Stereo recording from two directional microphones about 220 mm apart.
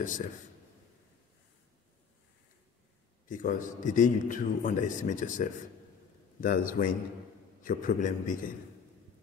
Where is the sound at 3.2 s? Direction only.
35° left (ahead or behind).